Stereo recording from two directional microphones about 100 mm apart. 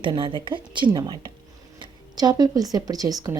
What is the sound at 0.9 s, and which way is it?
A woman's voice, 45° right (ahead or behind).